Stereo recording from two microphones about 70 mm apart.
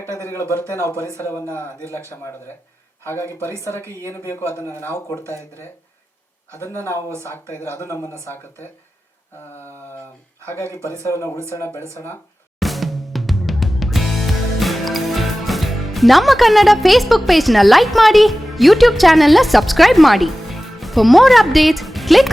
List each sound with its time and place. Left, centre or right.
0.2 s a man's voice: left
3.0 s a man's voice: left
6.6 s a man's voice: left
10.4 s a man's voice: left
12.5 s music: centre